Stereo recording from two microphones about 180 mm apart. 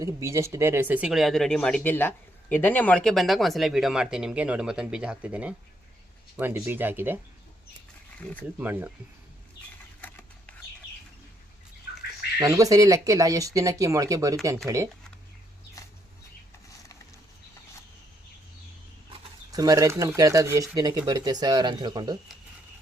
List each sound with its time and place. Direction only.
0.0 s speech: 15° right (ahead or behind)
8.5 s speech: 10° right (ahead or behind)
10.0 s a sound: 10° left (ahead or behind)
12.4 s speech: 20° right (ahead or behind)
19.5 s speech: 20° right (ahead or behind)